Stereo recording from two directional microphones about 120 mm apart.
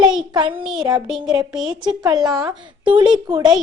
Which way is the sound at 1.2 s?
35° right (ahead or behind).